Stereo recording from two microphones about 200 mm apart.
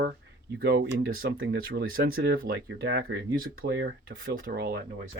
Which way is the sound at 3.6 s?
60° right (ahead or behind).